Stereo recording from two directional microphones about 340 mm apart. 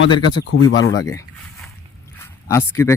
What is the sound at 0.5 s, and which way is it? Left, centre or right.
Speech, left.